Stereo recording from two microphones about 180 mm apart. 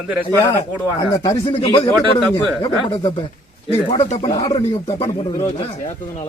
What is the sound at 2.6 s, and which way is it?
A man's voice, 30° left (ahead or behind).